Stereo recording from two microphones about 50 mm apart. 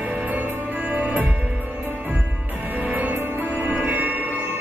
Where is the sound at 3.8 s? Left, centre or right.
Right.